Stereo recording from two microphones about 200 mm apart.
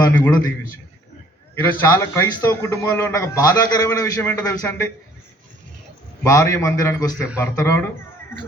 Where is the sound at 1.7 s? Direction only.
10° left (ahead or behind).